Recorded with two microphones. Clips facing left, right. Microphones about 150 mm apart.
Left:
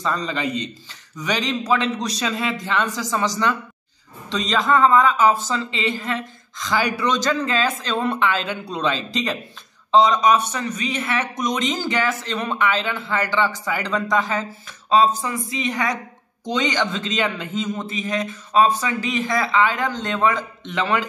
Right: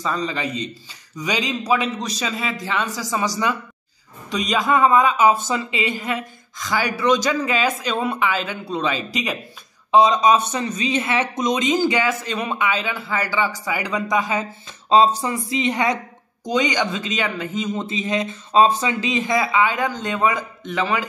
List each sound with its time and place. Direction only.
0.0 s a man's voice: 5° right (ahead or behind)
14.9 s speech: 30° right (ahead or behind)
16.4 s a woman's voice: 15° right (ahead or behind)
17.7 s a woman's voice: 20° right (ahead or behind); by 21.0 s 5° right (ahead or behind)